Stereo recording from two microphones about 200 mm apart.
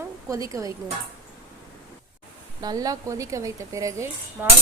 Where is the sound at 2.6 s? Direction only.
20° right (ahead or behind).